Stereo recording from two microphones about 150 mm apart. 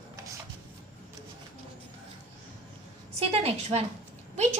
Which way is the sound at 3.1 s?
40° right (ahead or behind).